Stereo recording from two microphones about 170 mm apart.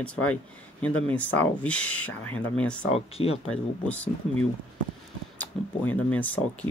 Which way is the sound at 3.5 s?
10° left (ahead or behind).